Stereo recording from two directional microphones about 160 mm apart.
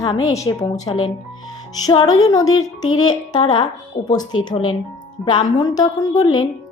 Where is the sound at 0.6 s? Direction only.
40° left (ahead or behind).